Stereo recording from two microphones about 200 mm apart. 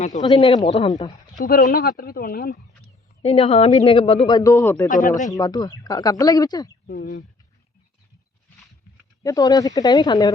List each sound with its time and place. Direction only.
0.2 s speech: 20° left (ahead or behind)
1.4 s speech: 40° left (ahead or behind)
3.2 s speech: 25° left (ahead or behind); by 4.9 s 10° left (ahead or behind)
4.9 s speech: 40° left (ahead or behind)
5.3 s speech: 20° left (ahead or behind)
6.8 s speech: 45° left (ahead or behind)
9.2 s speech: 20° left (ahead or behind)